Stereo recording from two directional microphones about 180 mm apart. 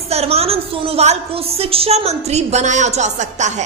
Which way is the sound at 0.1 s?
35° right (ahead or behind).